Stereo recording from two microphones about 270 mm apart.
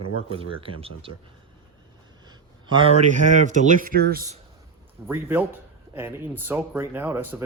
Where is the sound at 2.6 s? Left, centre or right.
Centre.